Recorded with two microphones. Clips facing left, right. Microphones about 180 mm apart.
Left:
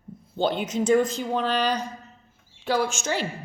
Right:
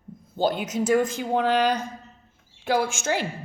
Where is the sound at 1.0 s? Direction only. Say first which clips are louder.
Right 2 dB; 50° right (ahead or behind).